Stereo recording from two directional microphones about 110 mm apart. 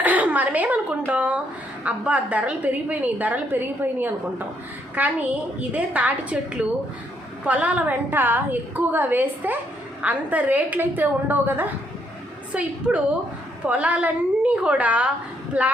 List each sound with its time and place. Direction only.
0.0 s a woman's voice: 15° right (ahead or behind)